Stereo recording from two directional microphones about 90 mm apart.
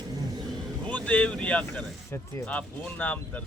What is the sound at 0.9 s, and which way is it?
Speech, 15° left (ahead or behind).